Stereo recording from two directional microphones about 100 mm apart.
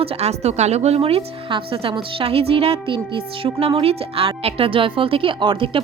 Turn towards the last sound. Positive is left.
turn(degrees=-60)  # may be behind; listen again after turning